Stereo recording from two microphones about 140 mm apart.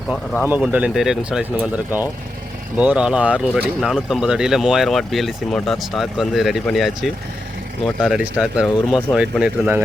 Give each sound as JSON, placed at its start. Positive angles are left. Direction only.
{"t": 0.4, "sound": "speech", "side_deg": -10}